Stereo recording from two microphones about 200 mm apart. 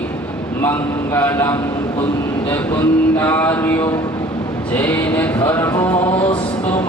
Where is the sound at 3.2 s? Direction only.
10° left (ahead or behind).